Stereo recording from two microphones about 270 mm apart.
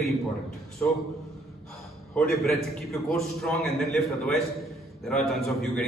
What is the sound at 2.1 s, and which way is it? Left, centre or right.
A man's voice, centre.